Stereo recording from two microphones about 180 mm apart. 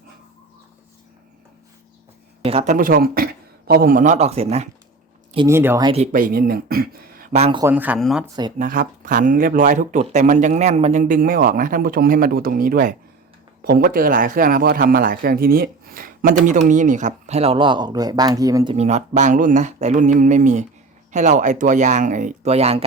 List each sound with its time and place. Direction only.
2.4 s a sound: 35° right (ahead or behind)
2.7 s a man's voice: 50° right (ahead or behind); by 4.7 s 35° right (ahead or behind)
5.5 s speech: 15° right (ahead or behind)
5.8 s a man's voice: 35° right (ahead or behind)
6.1 s speech: 55° right (ahead or behind)
7.3 s a man's voice: 35° right (ahead or behind)
7.6 s speech: 10° right (ahead or behind)
7.9 s speech: centre (ahead or behind)
8.5 s a man's voice: 50° right (ahead or behind); by 18.7 s 20° right (ahead or behind)
18.7 s a man's voice: 35° right (ahead or behind)